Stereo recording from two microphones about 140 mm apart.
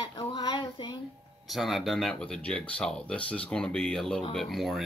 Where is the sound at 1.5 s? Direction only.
Centre (ahead or behind).